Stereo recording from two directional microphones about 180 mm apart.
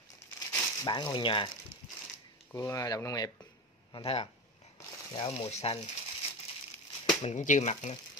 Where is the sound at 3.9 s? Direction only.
35° left (ahead or behind).